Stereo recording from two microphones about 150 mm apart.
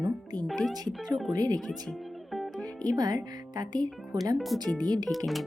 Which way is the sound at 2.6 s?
25° right (ahead or behind).